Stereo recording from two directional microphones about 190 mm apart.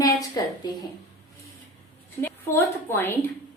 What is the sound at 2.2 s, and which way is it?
A woman's voice, 10° left (ahead or behind).